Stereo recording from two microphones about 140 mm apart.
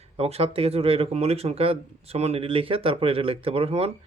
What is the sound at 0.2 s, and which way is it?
Speech, 45° right (ahead or behind).